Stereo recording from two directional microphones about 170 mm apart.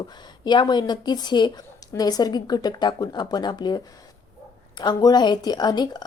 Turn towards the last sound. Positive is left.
turn(degrees=25)  # may be behind; listen again after turning